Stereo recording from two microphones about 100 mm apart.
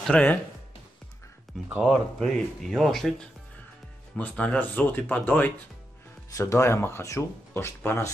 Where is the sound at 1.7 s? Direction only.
10° right (ahead or behind).